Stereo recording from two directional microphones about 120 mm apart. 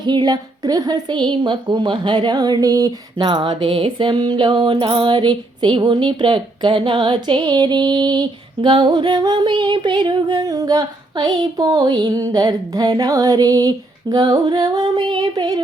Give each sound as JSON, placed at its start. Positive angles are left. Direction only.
{"t": 0.0, "sound": "a woman's voice", "side_deg": -35}